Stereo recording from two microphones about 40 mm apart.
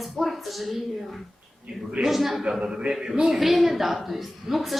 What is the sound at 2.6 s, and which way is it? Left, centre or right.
Speech, right.